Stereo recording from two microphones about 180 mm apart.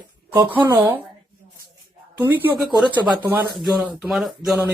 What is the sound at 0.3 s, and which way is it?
Speech, 10° right (ahead or behind).